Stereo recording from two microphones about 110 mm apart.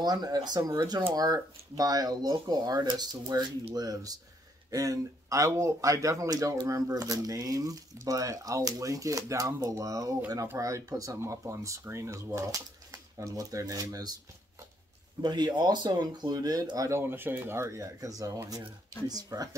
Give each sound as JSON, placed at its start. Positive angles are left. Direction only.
{"t": 0.0, "sound": "speech", "side_deg": -35}
{"t": 15.2, "sound": "speech", "side_deg": -40}
{"t": 17.0, "sound": "speech", "side_deg": -20}